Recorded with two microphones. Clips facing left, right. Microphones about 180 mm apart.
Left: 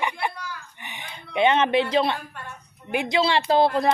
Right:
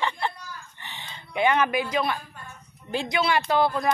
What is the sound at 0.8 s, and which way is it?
Chicken, 15° left (ahead or behind).